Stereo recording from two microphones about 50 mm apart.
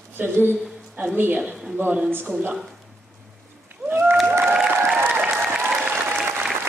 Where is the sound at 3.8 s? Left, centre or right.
Right.